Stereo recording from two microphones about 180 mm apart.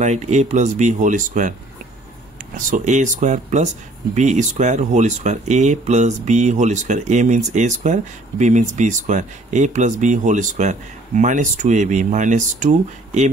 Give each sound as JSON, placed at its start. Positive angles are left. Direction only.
{"t": 0.0, "sound": "speech", "side_deg": -40}
{"t": 2.5, "sound": "speech", "side_deg": -45}